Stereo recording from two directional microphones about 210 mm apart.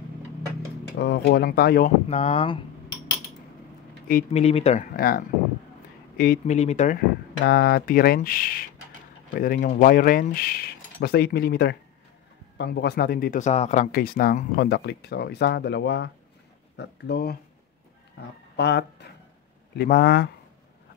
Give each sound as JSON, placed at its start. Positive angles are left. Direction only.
{"t": 0.9, "sound": "speech", "side_deg": 55}
{"t": 2.0, "sound": "speech", "side_deg": 30}
{"t": 4.3, "sound": "speech", "side_deg": 30}
{"t": 7.4, "sound": "speech", "side_deg": 50}
{"t": 18.6, "sound": "speech", "side_deg": 55}